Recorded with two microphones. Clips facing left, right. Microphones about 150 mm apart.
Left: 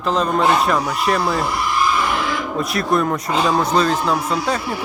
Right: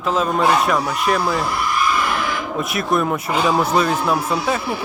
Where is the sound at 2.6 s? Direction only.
Centre (ahead or behind).